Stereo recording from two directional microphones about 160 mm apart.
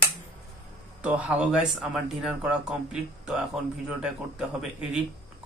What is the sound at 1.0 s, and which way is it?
Speech, 10° right (ahead or behind).